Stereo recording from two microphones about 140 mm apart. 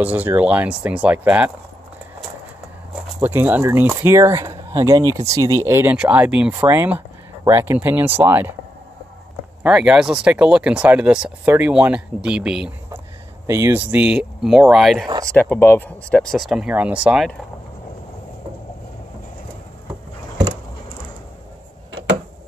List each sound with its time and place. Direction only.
0.0 s speech: 10° right (ahead or behind)
3.2 s speech: 15° right (ahead or behind)
9.6 s speech: 5° right (ahead or behind)
13.5 s speech: 20° right (ahead or behind); by 15.0 s centre (ahead or behind)
15.3 s speech: 15° left (ahead or behind); by 17.3 s 5° right (ahead or behind)